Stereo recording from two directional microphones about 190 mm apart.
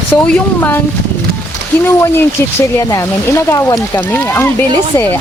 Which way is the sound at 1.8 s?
15° left (ahead or behind).